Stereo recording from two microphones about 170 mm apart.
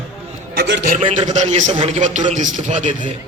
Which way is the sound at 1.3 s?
40° right (ahead or behind).